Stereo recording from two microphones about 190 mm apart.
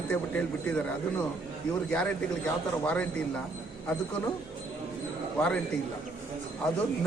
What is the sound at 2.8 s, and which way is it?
Speech, 5° left (ahead or behind).